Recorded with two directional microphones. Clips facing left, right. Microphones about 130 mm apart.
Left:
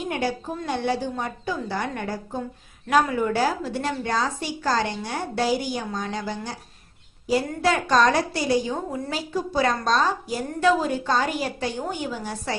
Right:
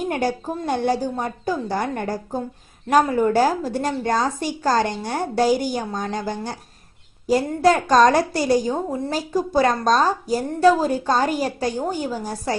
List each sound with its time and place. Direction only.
0.1 s a woman's voice: 45° right (ahead or behind)
7.6 s a woman's voice: 40° right (ahead or behind)